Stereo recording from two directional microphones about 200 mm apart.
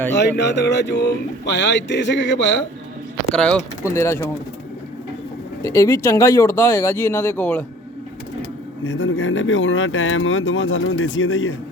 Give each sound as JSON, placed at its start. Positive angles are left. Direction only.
{"t": 0.1, "sound": "speech", "side_deg": 60}
{"t": 3.3, "sound": "speech", "side_deg": 5}
{"t": 5.6, "sound": "speech", "side_deg": 15}
{"t": 8.9, "sound": "speech", "side_deg": 70}